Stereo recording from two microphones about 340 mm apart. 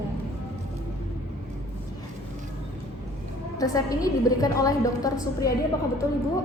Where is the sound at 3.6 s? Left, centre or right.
Centre.